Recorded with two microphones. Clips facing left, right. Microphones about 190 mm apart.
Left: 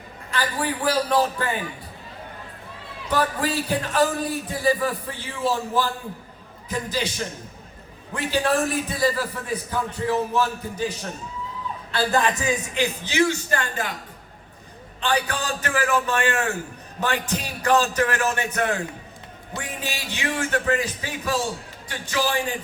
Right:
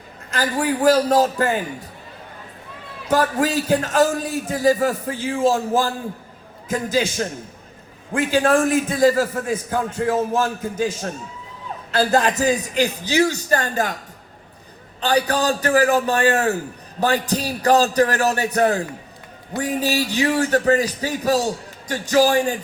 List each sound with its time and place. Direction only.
0.3 s a man's voice: 45° right (ahead or behind)
3.1 s a man's voice: 45° right (ahead or behind)
15.0 s a man's voice: 40° right (ahead or behind)